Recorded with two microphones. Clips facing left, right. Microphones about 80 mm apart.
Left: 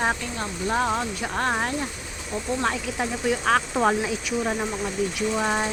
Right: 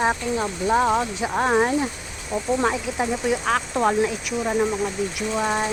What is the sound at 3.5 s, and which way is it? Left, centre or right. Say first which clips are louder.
Speech: left 1 dB; centre.